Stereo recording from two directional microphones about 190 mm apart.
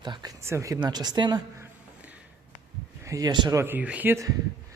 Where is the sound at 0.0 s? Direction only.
20° right (ahead or behind).